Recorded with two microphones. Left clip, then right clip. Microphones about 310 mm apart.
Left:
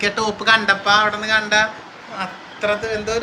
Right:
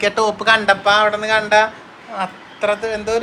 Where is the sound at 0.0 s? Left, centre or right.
Centre.